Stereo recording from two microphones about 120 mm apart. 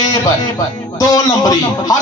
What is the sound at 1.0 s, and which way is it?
Speech, 30° left (ahead or behind).